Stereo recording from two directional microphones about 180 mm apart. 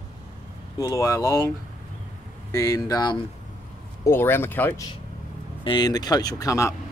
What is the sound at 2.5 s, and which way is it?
Speech, 15° left (ahead or behind).